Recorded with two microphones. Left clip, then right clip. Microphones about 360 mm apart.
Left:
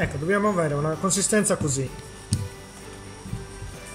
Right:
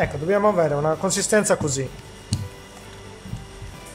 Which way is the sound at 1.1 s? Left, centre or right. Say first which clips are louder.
Right 2 dB; centre.